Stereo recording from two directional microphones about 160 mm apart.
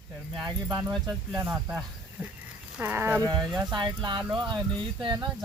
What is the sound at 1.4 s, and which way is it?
Speech, 10° right (ahead or behind).